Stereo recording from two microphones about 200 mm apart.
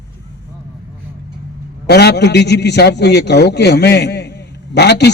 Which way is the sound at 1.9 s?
55° left (ahead or behind).